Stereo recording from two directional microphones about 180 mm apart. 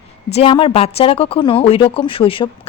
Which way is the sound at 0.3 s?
30° left (ahead or behind).